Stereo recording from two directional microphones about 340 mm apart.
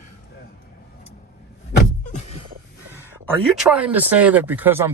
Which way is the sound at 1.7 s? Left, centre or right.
Centre.